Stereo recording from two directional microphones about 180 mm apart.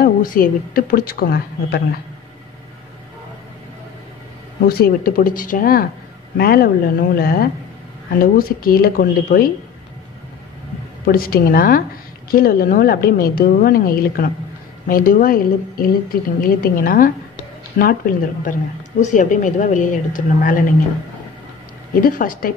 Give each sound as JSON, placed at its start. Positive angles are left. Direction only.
{"t": 0.0, "sound": "a woman's voice", "side_deg": 50}
{"t": 4.6, "sound": "a woman's voice", "side_deg": 55}
{"t": 11.1, "sound": "a woman's voice", "side_deg": 55}
{"t": 22.0, "sound": "a woman's voice", "side_deg": 50}